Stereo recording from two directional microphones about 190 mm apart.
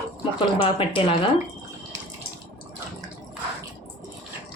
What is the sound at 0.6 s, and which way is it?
Speech, 25° left (ahead or behind).